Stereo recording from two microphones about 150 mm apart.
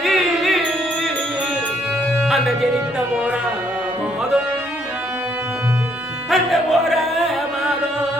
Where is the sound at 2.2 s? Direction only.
5° right (ahead or behind).